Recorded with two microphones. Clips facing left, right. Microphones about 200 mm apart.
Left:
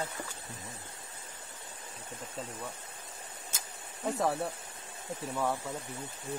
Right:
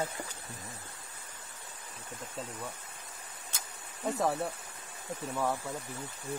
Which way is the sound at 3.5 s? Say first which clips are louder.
Left 1 dB; centre (ahead or behind).